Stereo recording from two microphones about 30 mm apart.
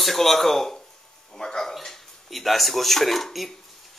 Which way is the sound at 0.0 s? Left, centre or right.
Centre.